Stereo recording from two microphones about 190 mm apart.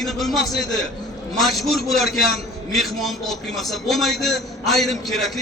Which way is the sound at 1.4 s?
Centre (ahead or behind).